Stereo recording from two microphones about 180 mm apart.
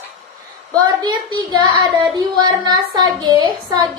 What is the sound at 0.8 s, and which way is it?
Speech, 25° right (ahead or behind).